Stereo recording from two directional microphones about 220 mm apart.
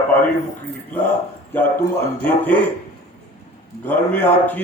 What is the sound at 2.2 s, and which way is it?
Speech, 10° left (ahead or behind).